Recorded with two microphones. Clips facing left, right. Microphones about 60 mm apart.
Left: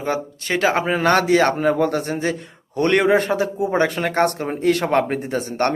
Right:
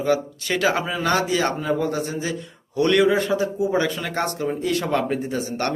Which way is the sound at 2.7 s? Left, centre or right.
Left.